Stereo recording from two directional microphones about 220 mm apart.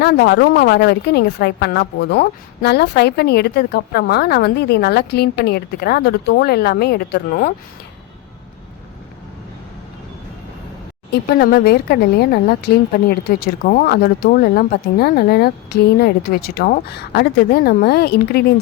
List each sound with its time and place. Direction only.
0.0 s a woman's voice: 50° left (ahead or behind)
11.1 s a woman's voice: 45° left (ahead or behind)